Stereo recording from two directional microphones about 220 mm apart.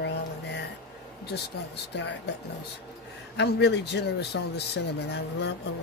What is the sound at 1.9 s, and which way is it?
Speech, 55° left (ahead or behind).